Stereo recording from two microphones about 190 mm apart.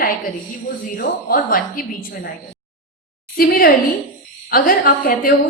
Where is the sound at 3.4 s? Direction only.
55° left (ahead or behind).